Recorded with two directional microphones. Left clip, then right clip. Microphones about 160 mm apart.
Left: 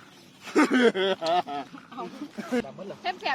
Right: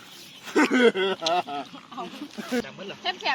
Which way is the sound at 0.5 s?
20° left (ahead or behind).